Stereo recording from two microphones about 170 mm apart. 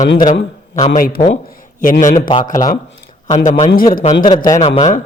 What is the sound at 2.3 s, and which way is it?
Speech, 25° left (ahead or behind).